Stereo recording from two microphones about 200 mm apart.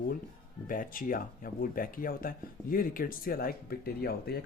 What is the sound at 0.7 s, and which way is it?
Speech, 45° left (ahead or behind).